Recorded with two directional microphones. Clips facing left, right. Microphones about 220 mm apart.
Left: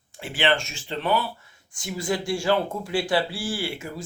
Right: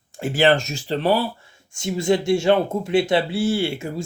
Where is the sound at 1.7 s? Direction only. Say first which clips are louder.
Right 7 dB; 25° right (ahead or behind).